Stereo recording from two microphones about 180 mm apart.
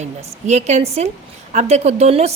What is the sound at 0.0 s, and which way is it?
A woman's voice, 40° right (ahead or behind).